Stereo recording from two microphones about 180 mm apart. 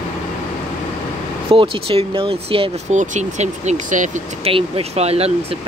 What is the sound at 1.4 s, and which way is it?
Speech, 30° right (ahead or behind).